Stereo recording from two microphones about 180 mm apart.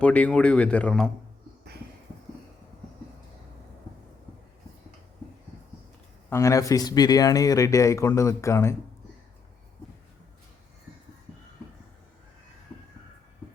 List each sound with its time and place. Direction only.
0.0 s speech: 5° left (ahead or behind)
6.3 s speech: 15° left (ahead or behind)